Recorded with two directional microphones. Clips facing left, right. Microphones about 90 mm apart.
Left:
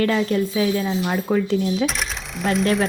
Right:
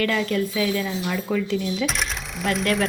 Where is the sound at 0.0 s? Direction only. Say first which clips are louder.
Left 3 dB; 25° left (ahead or behind).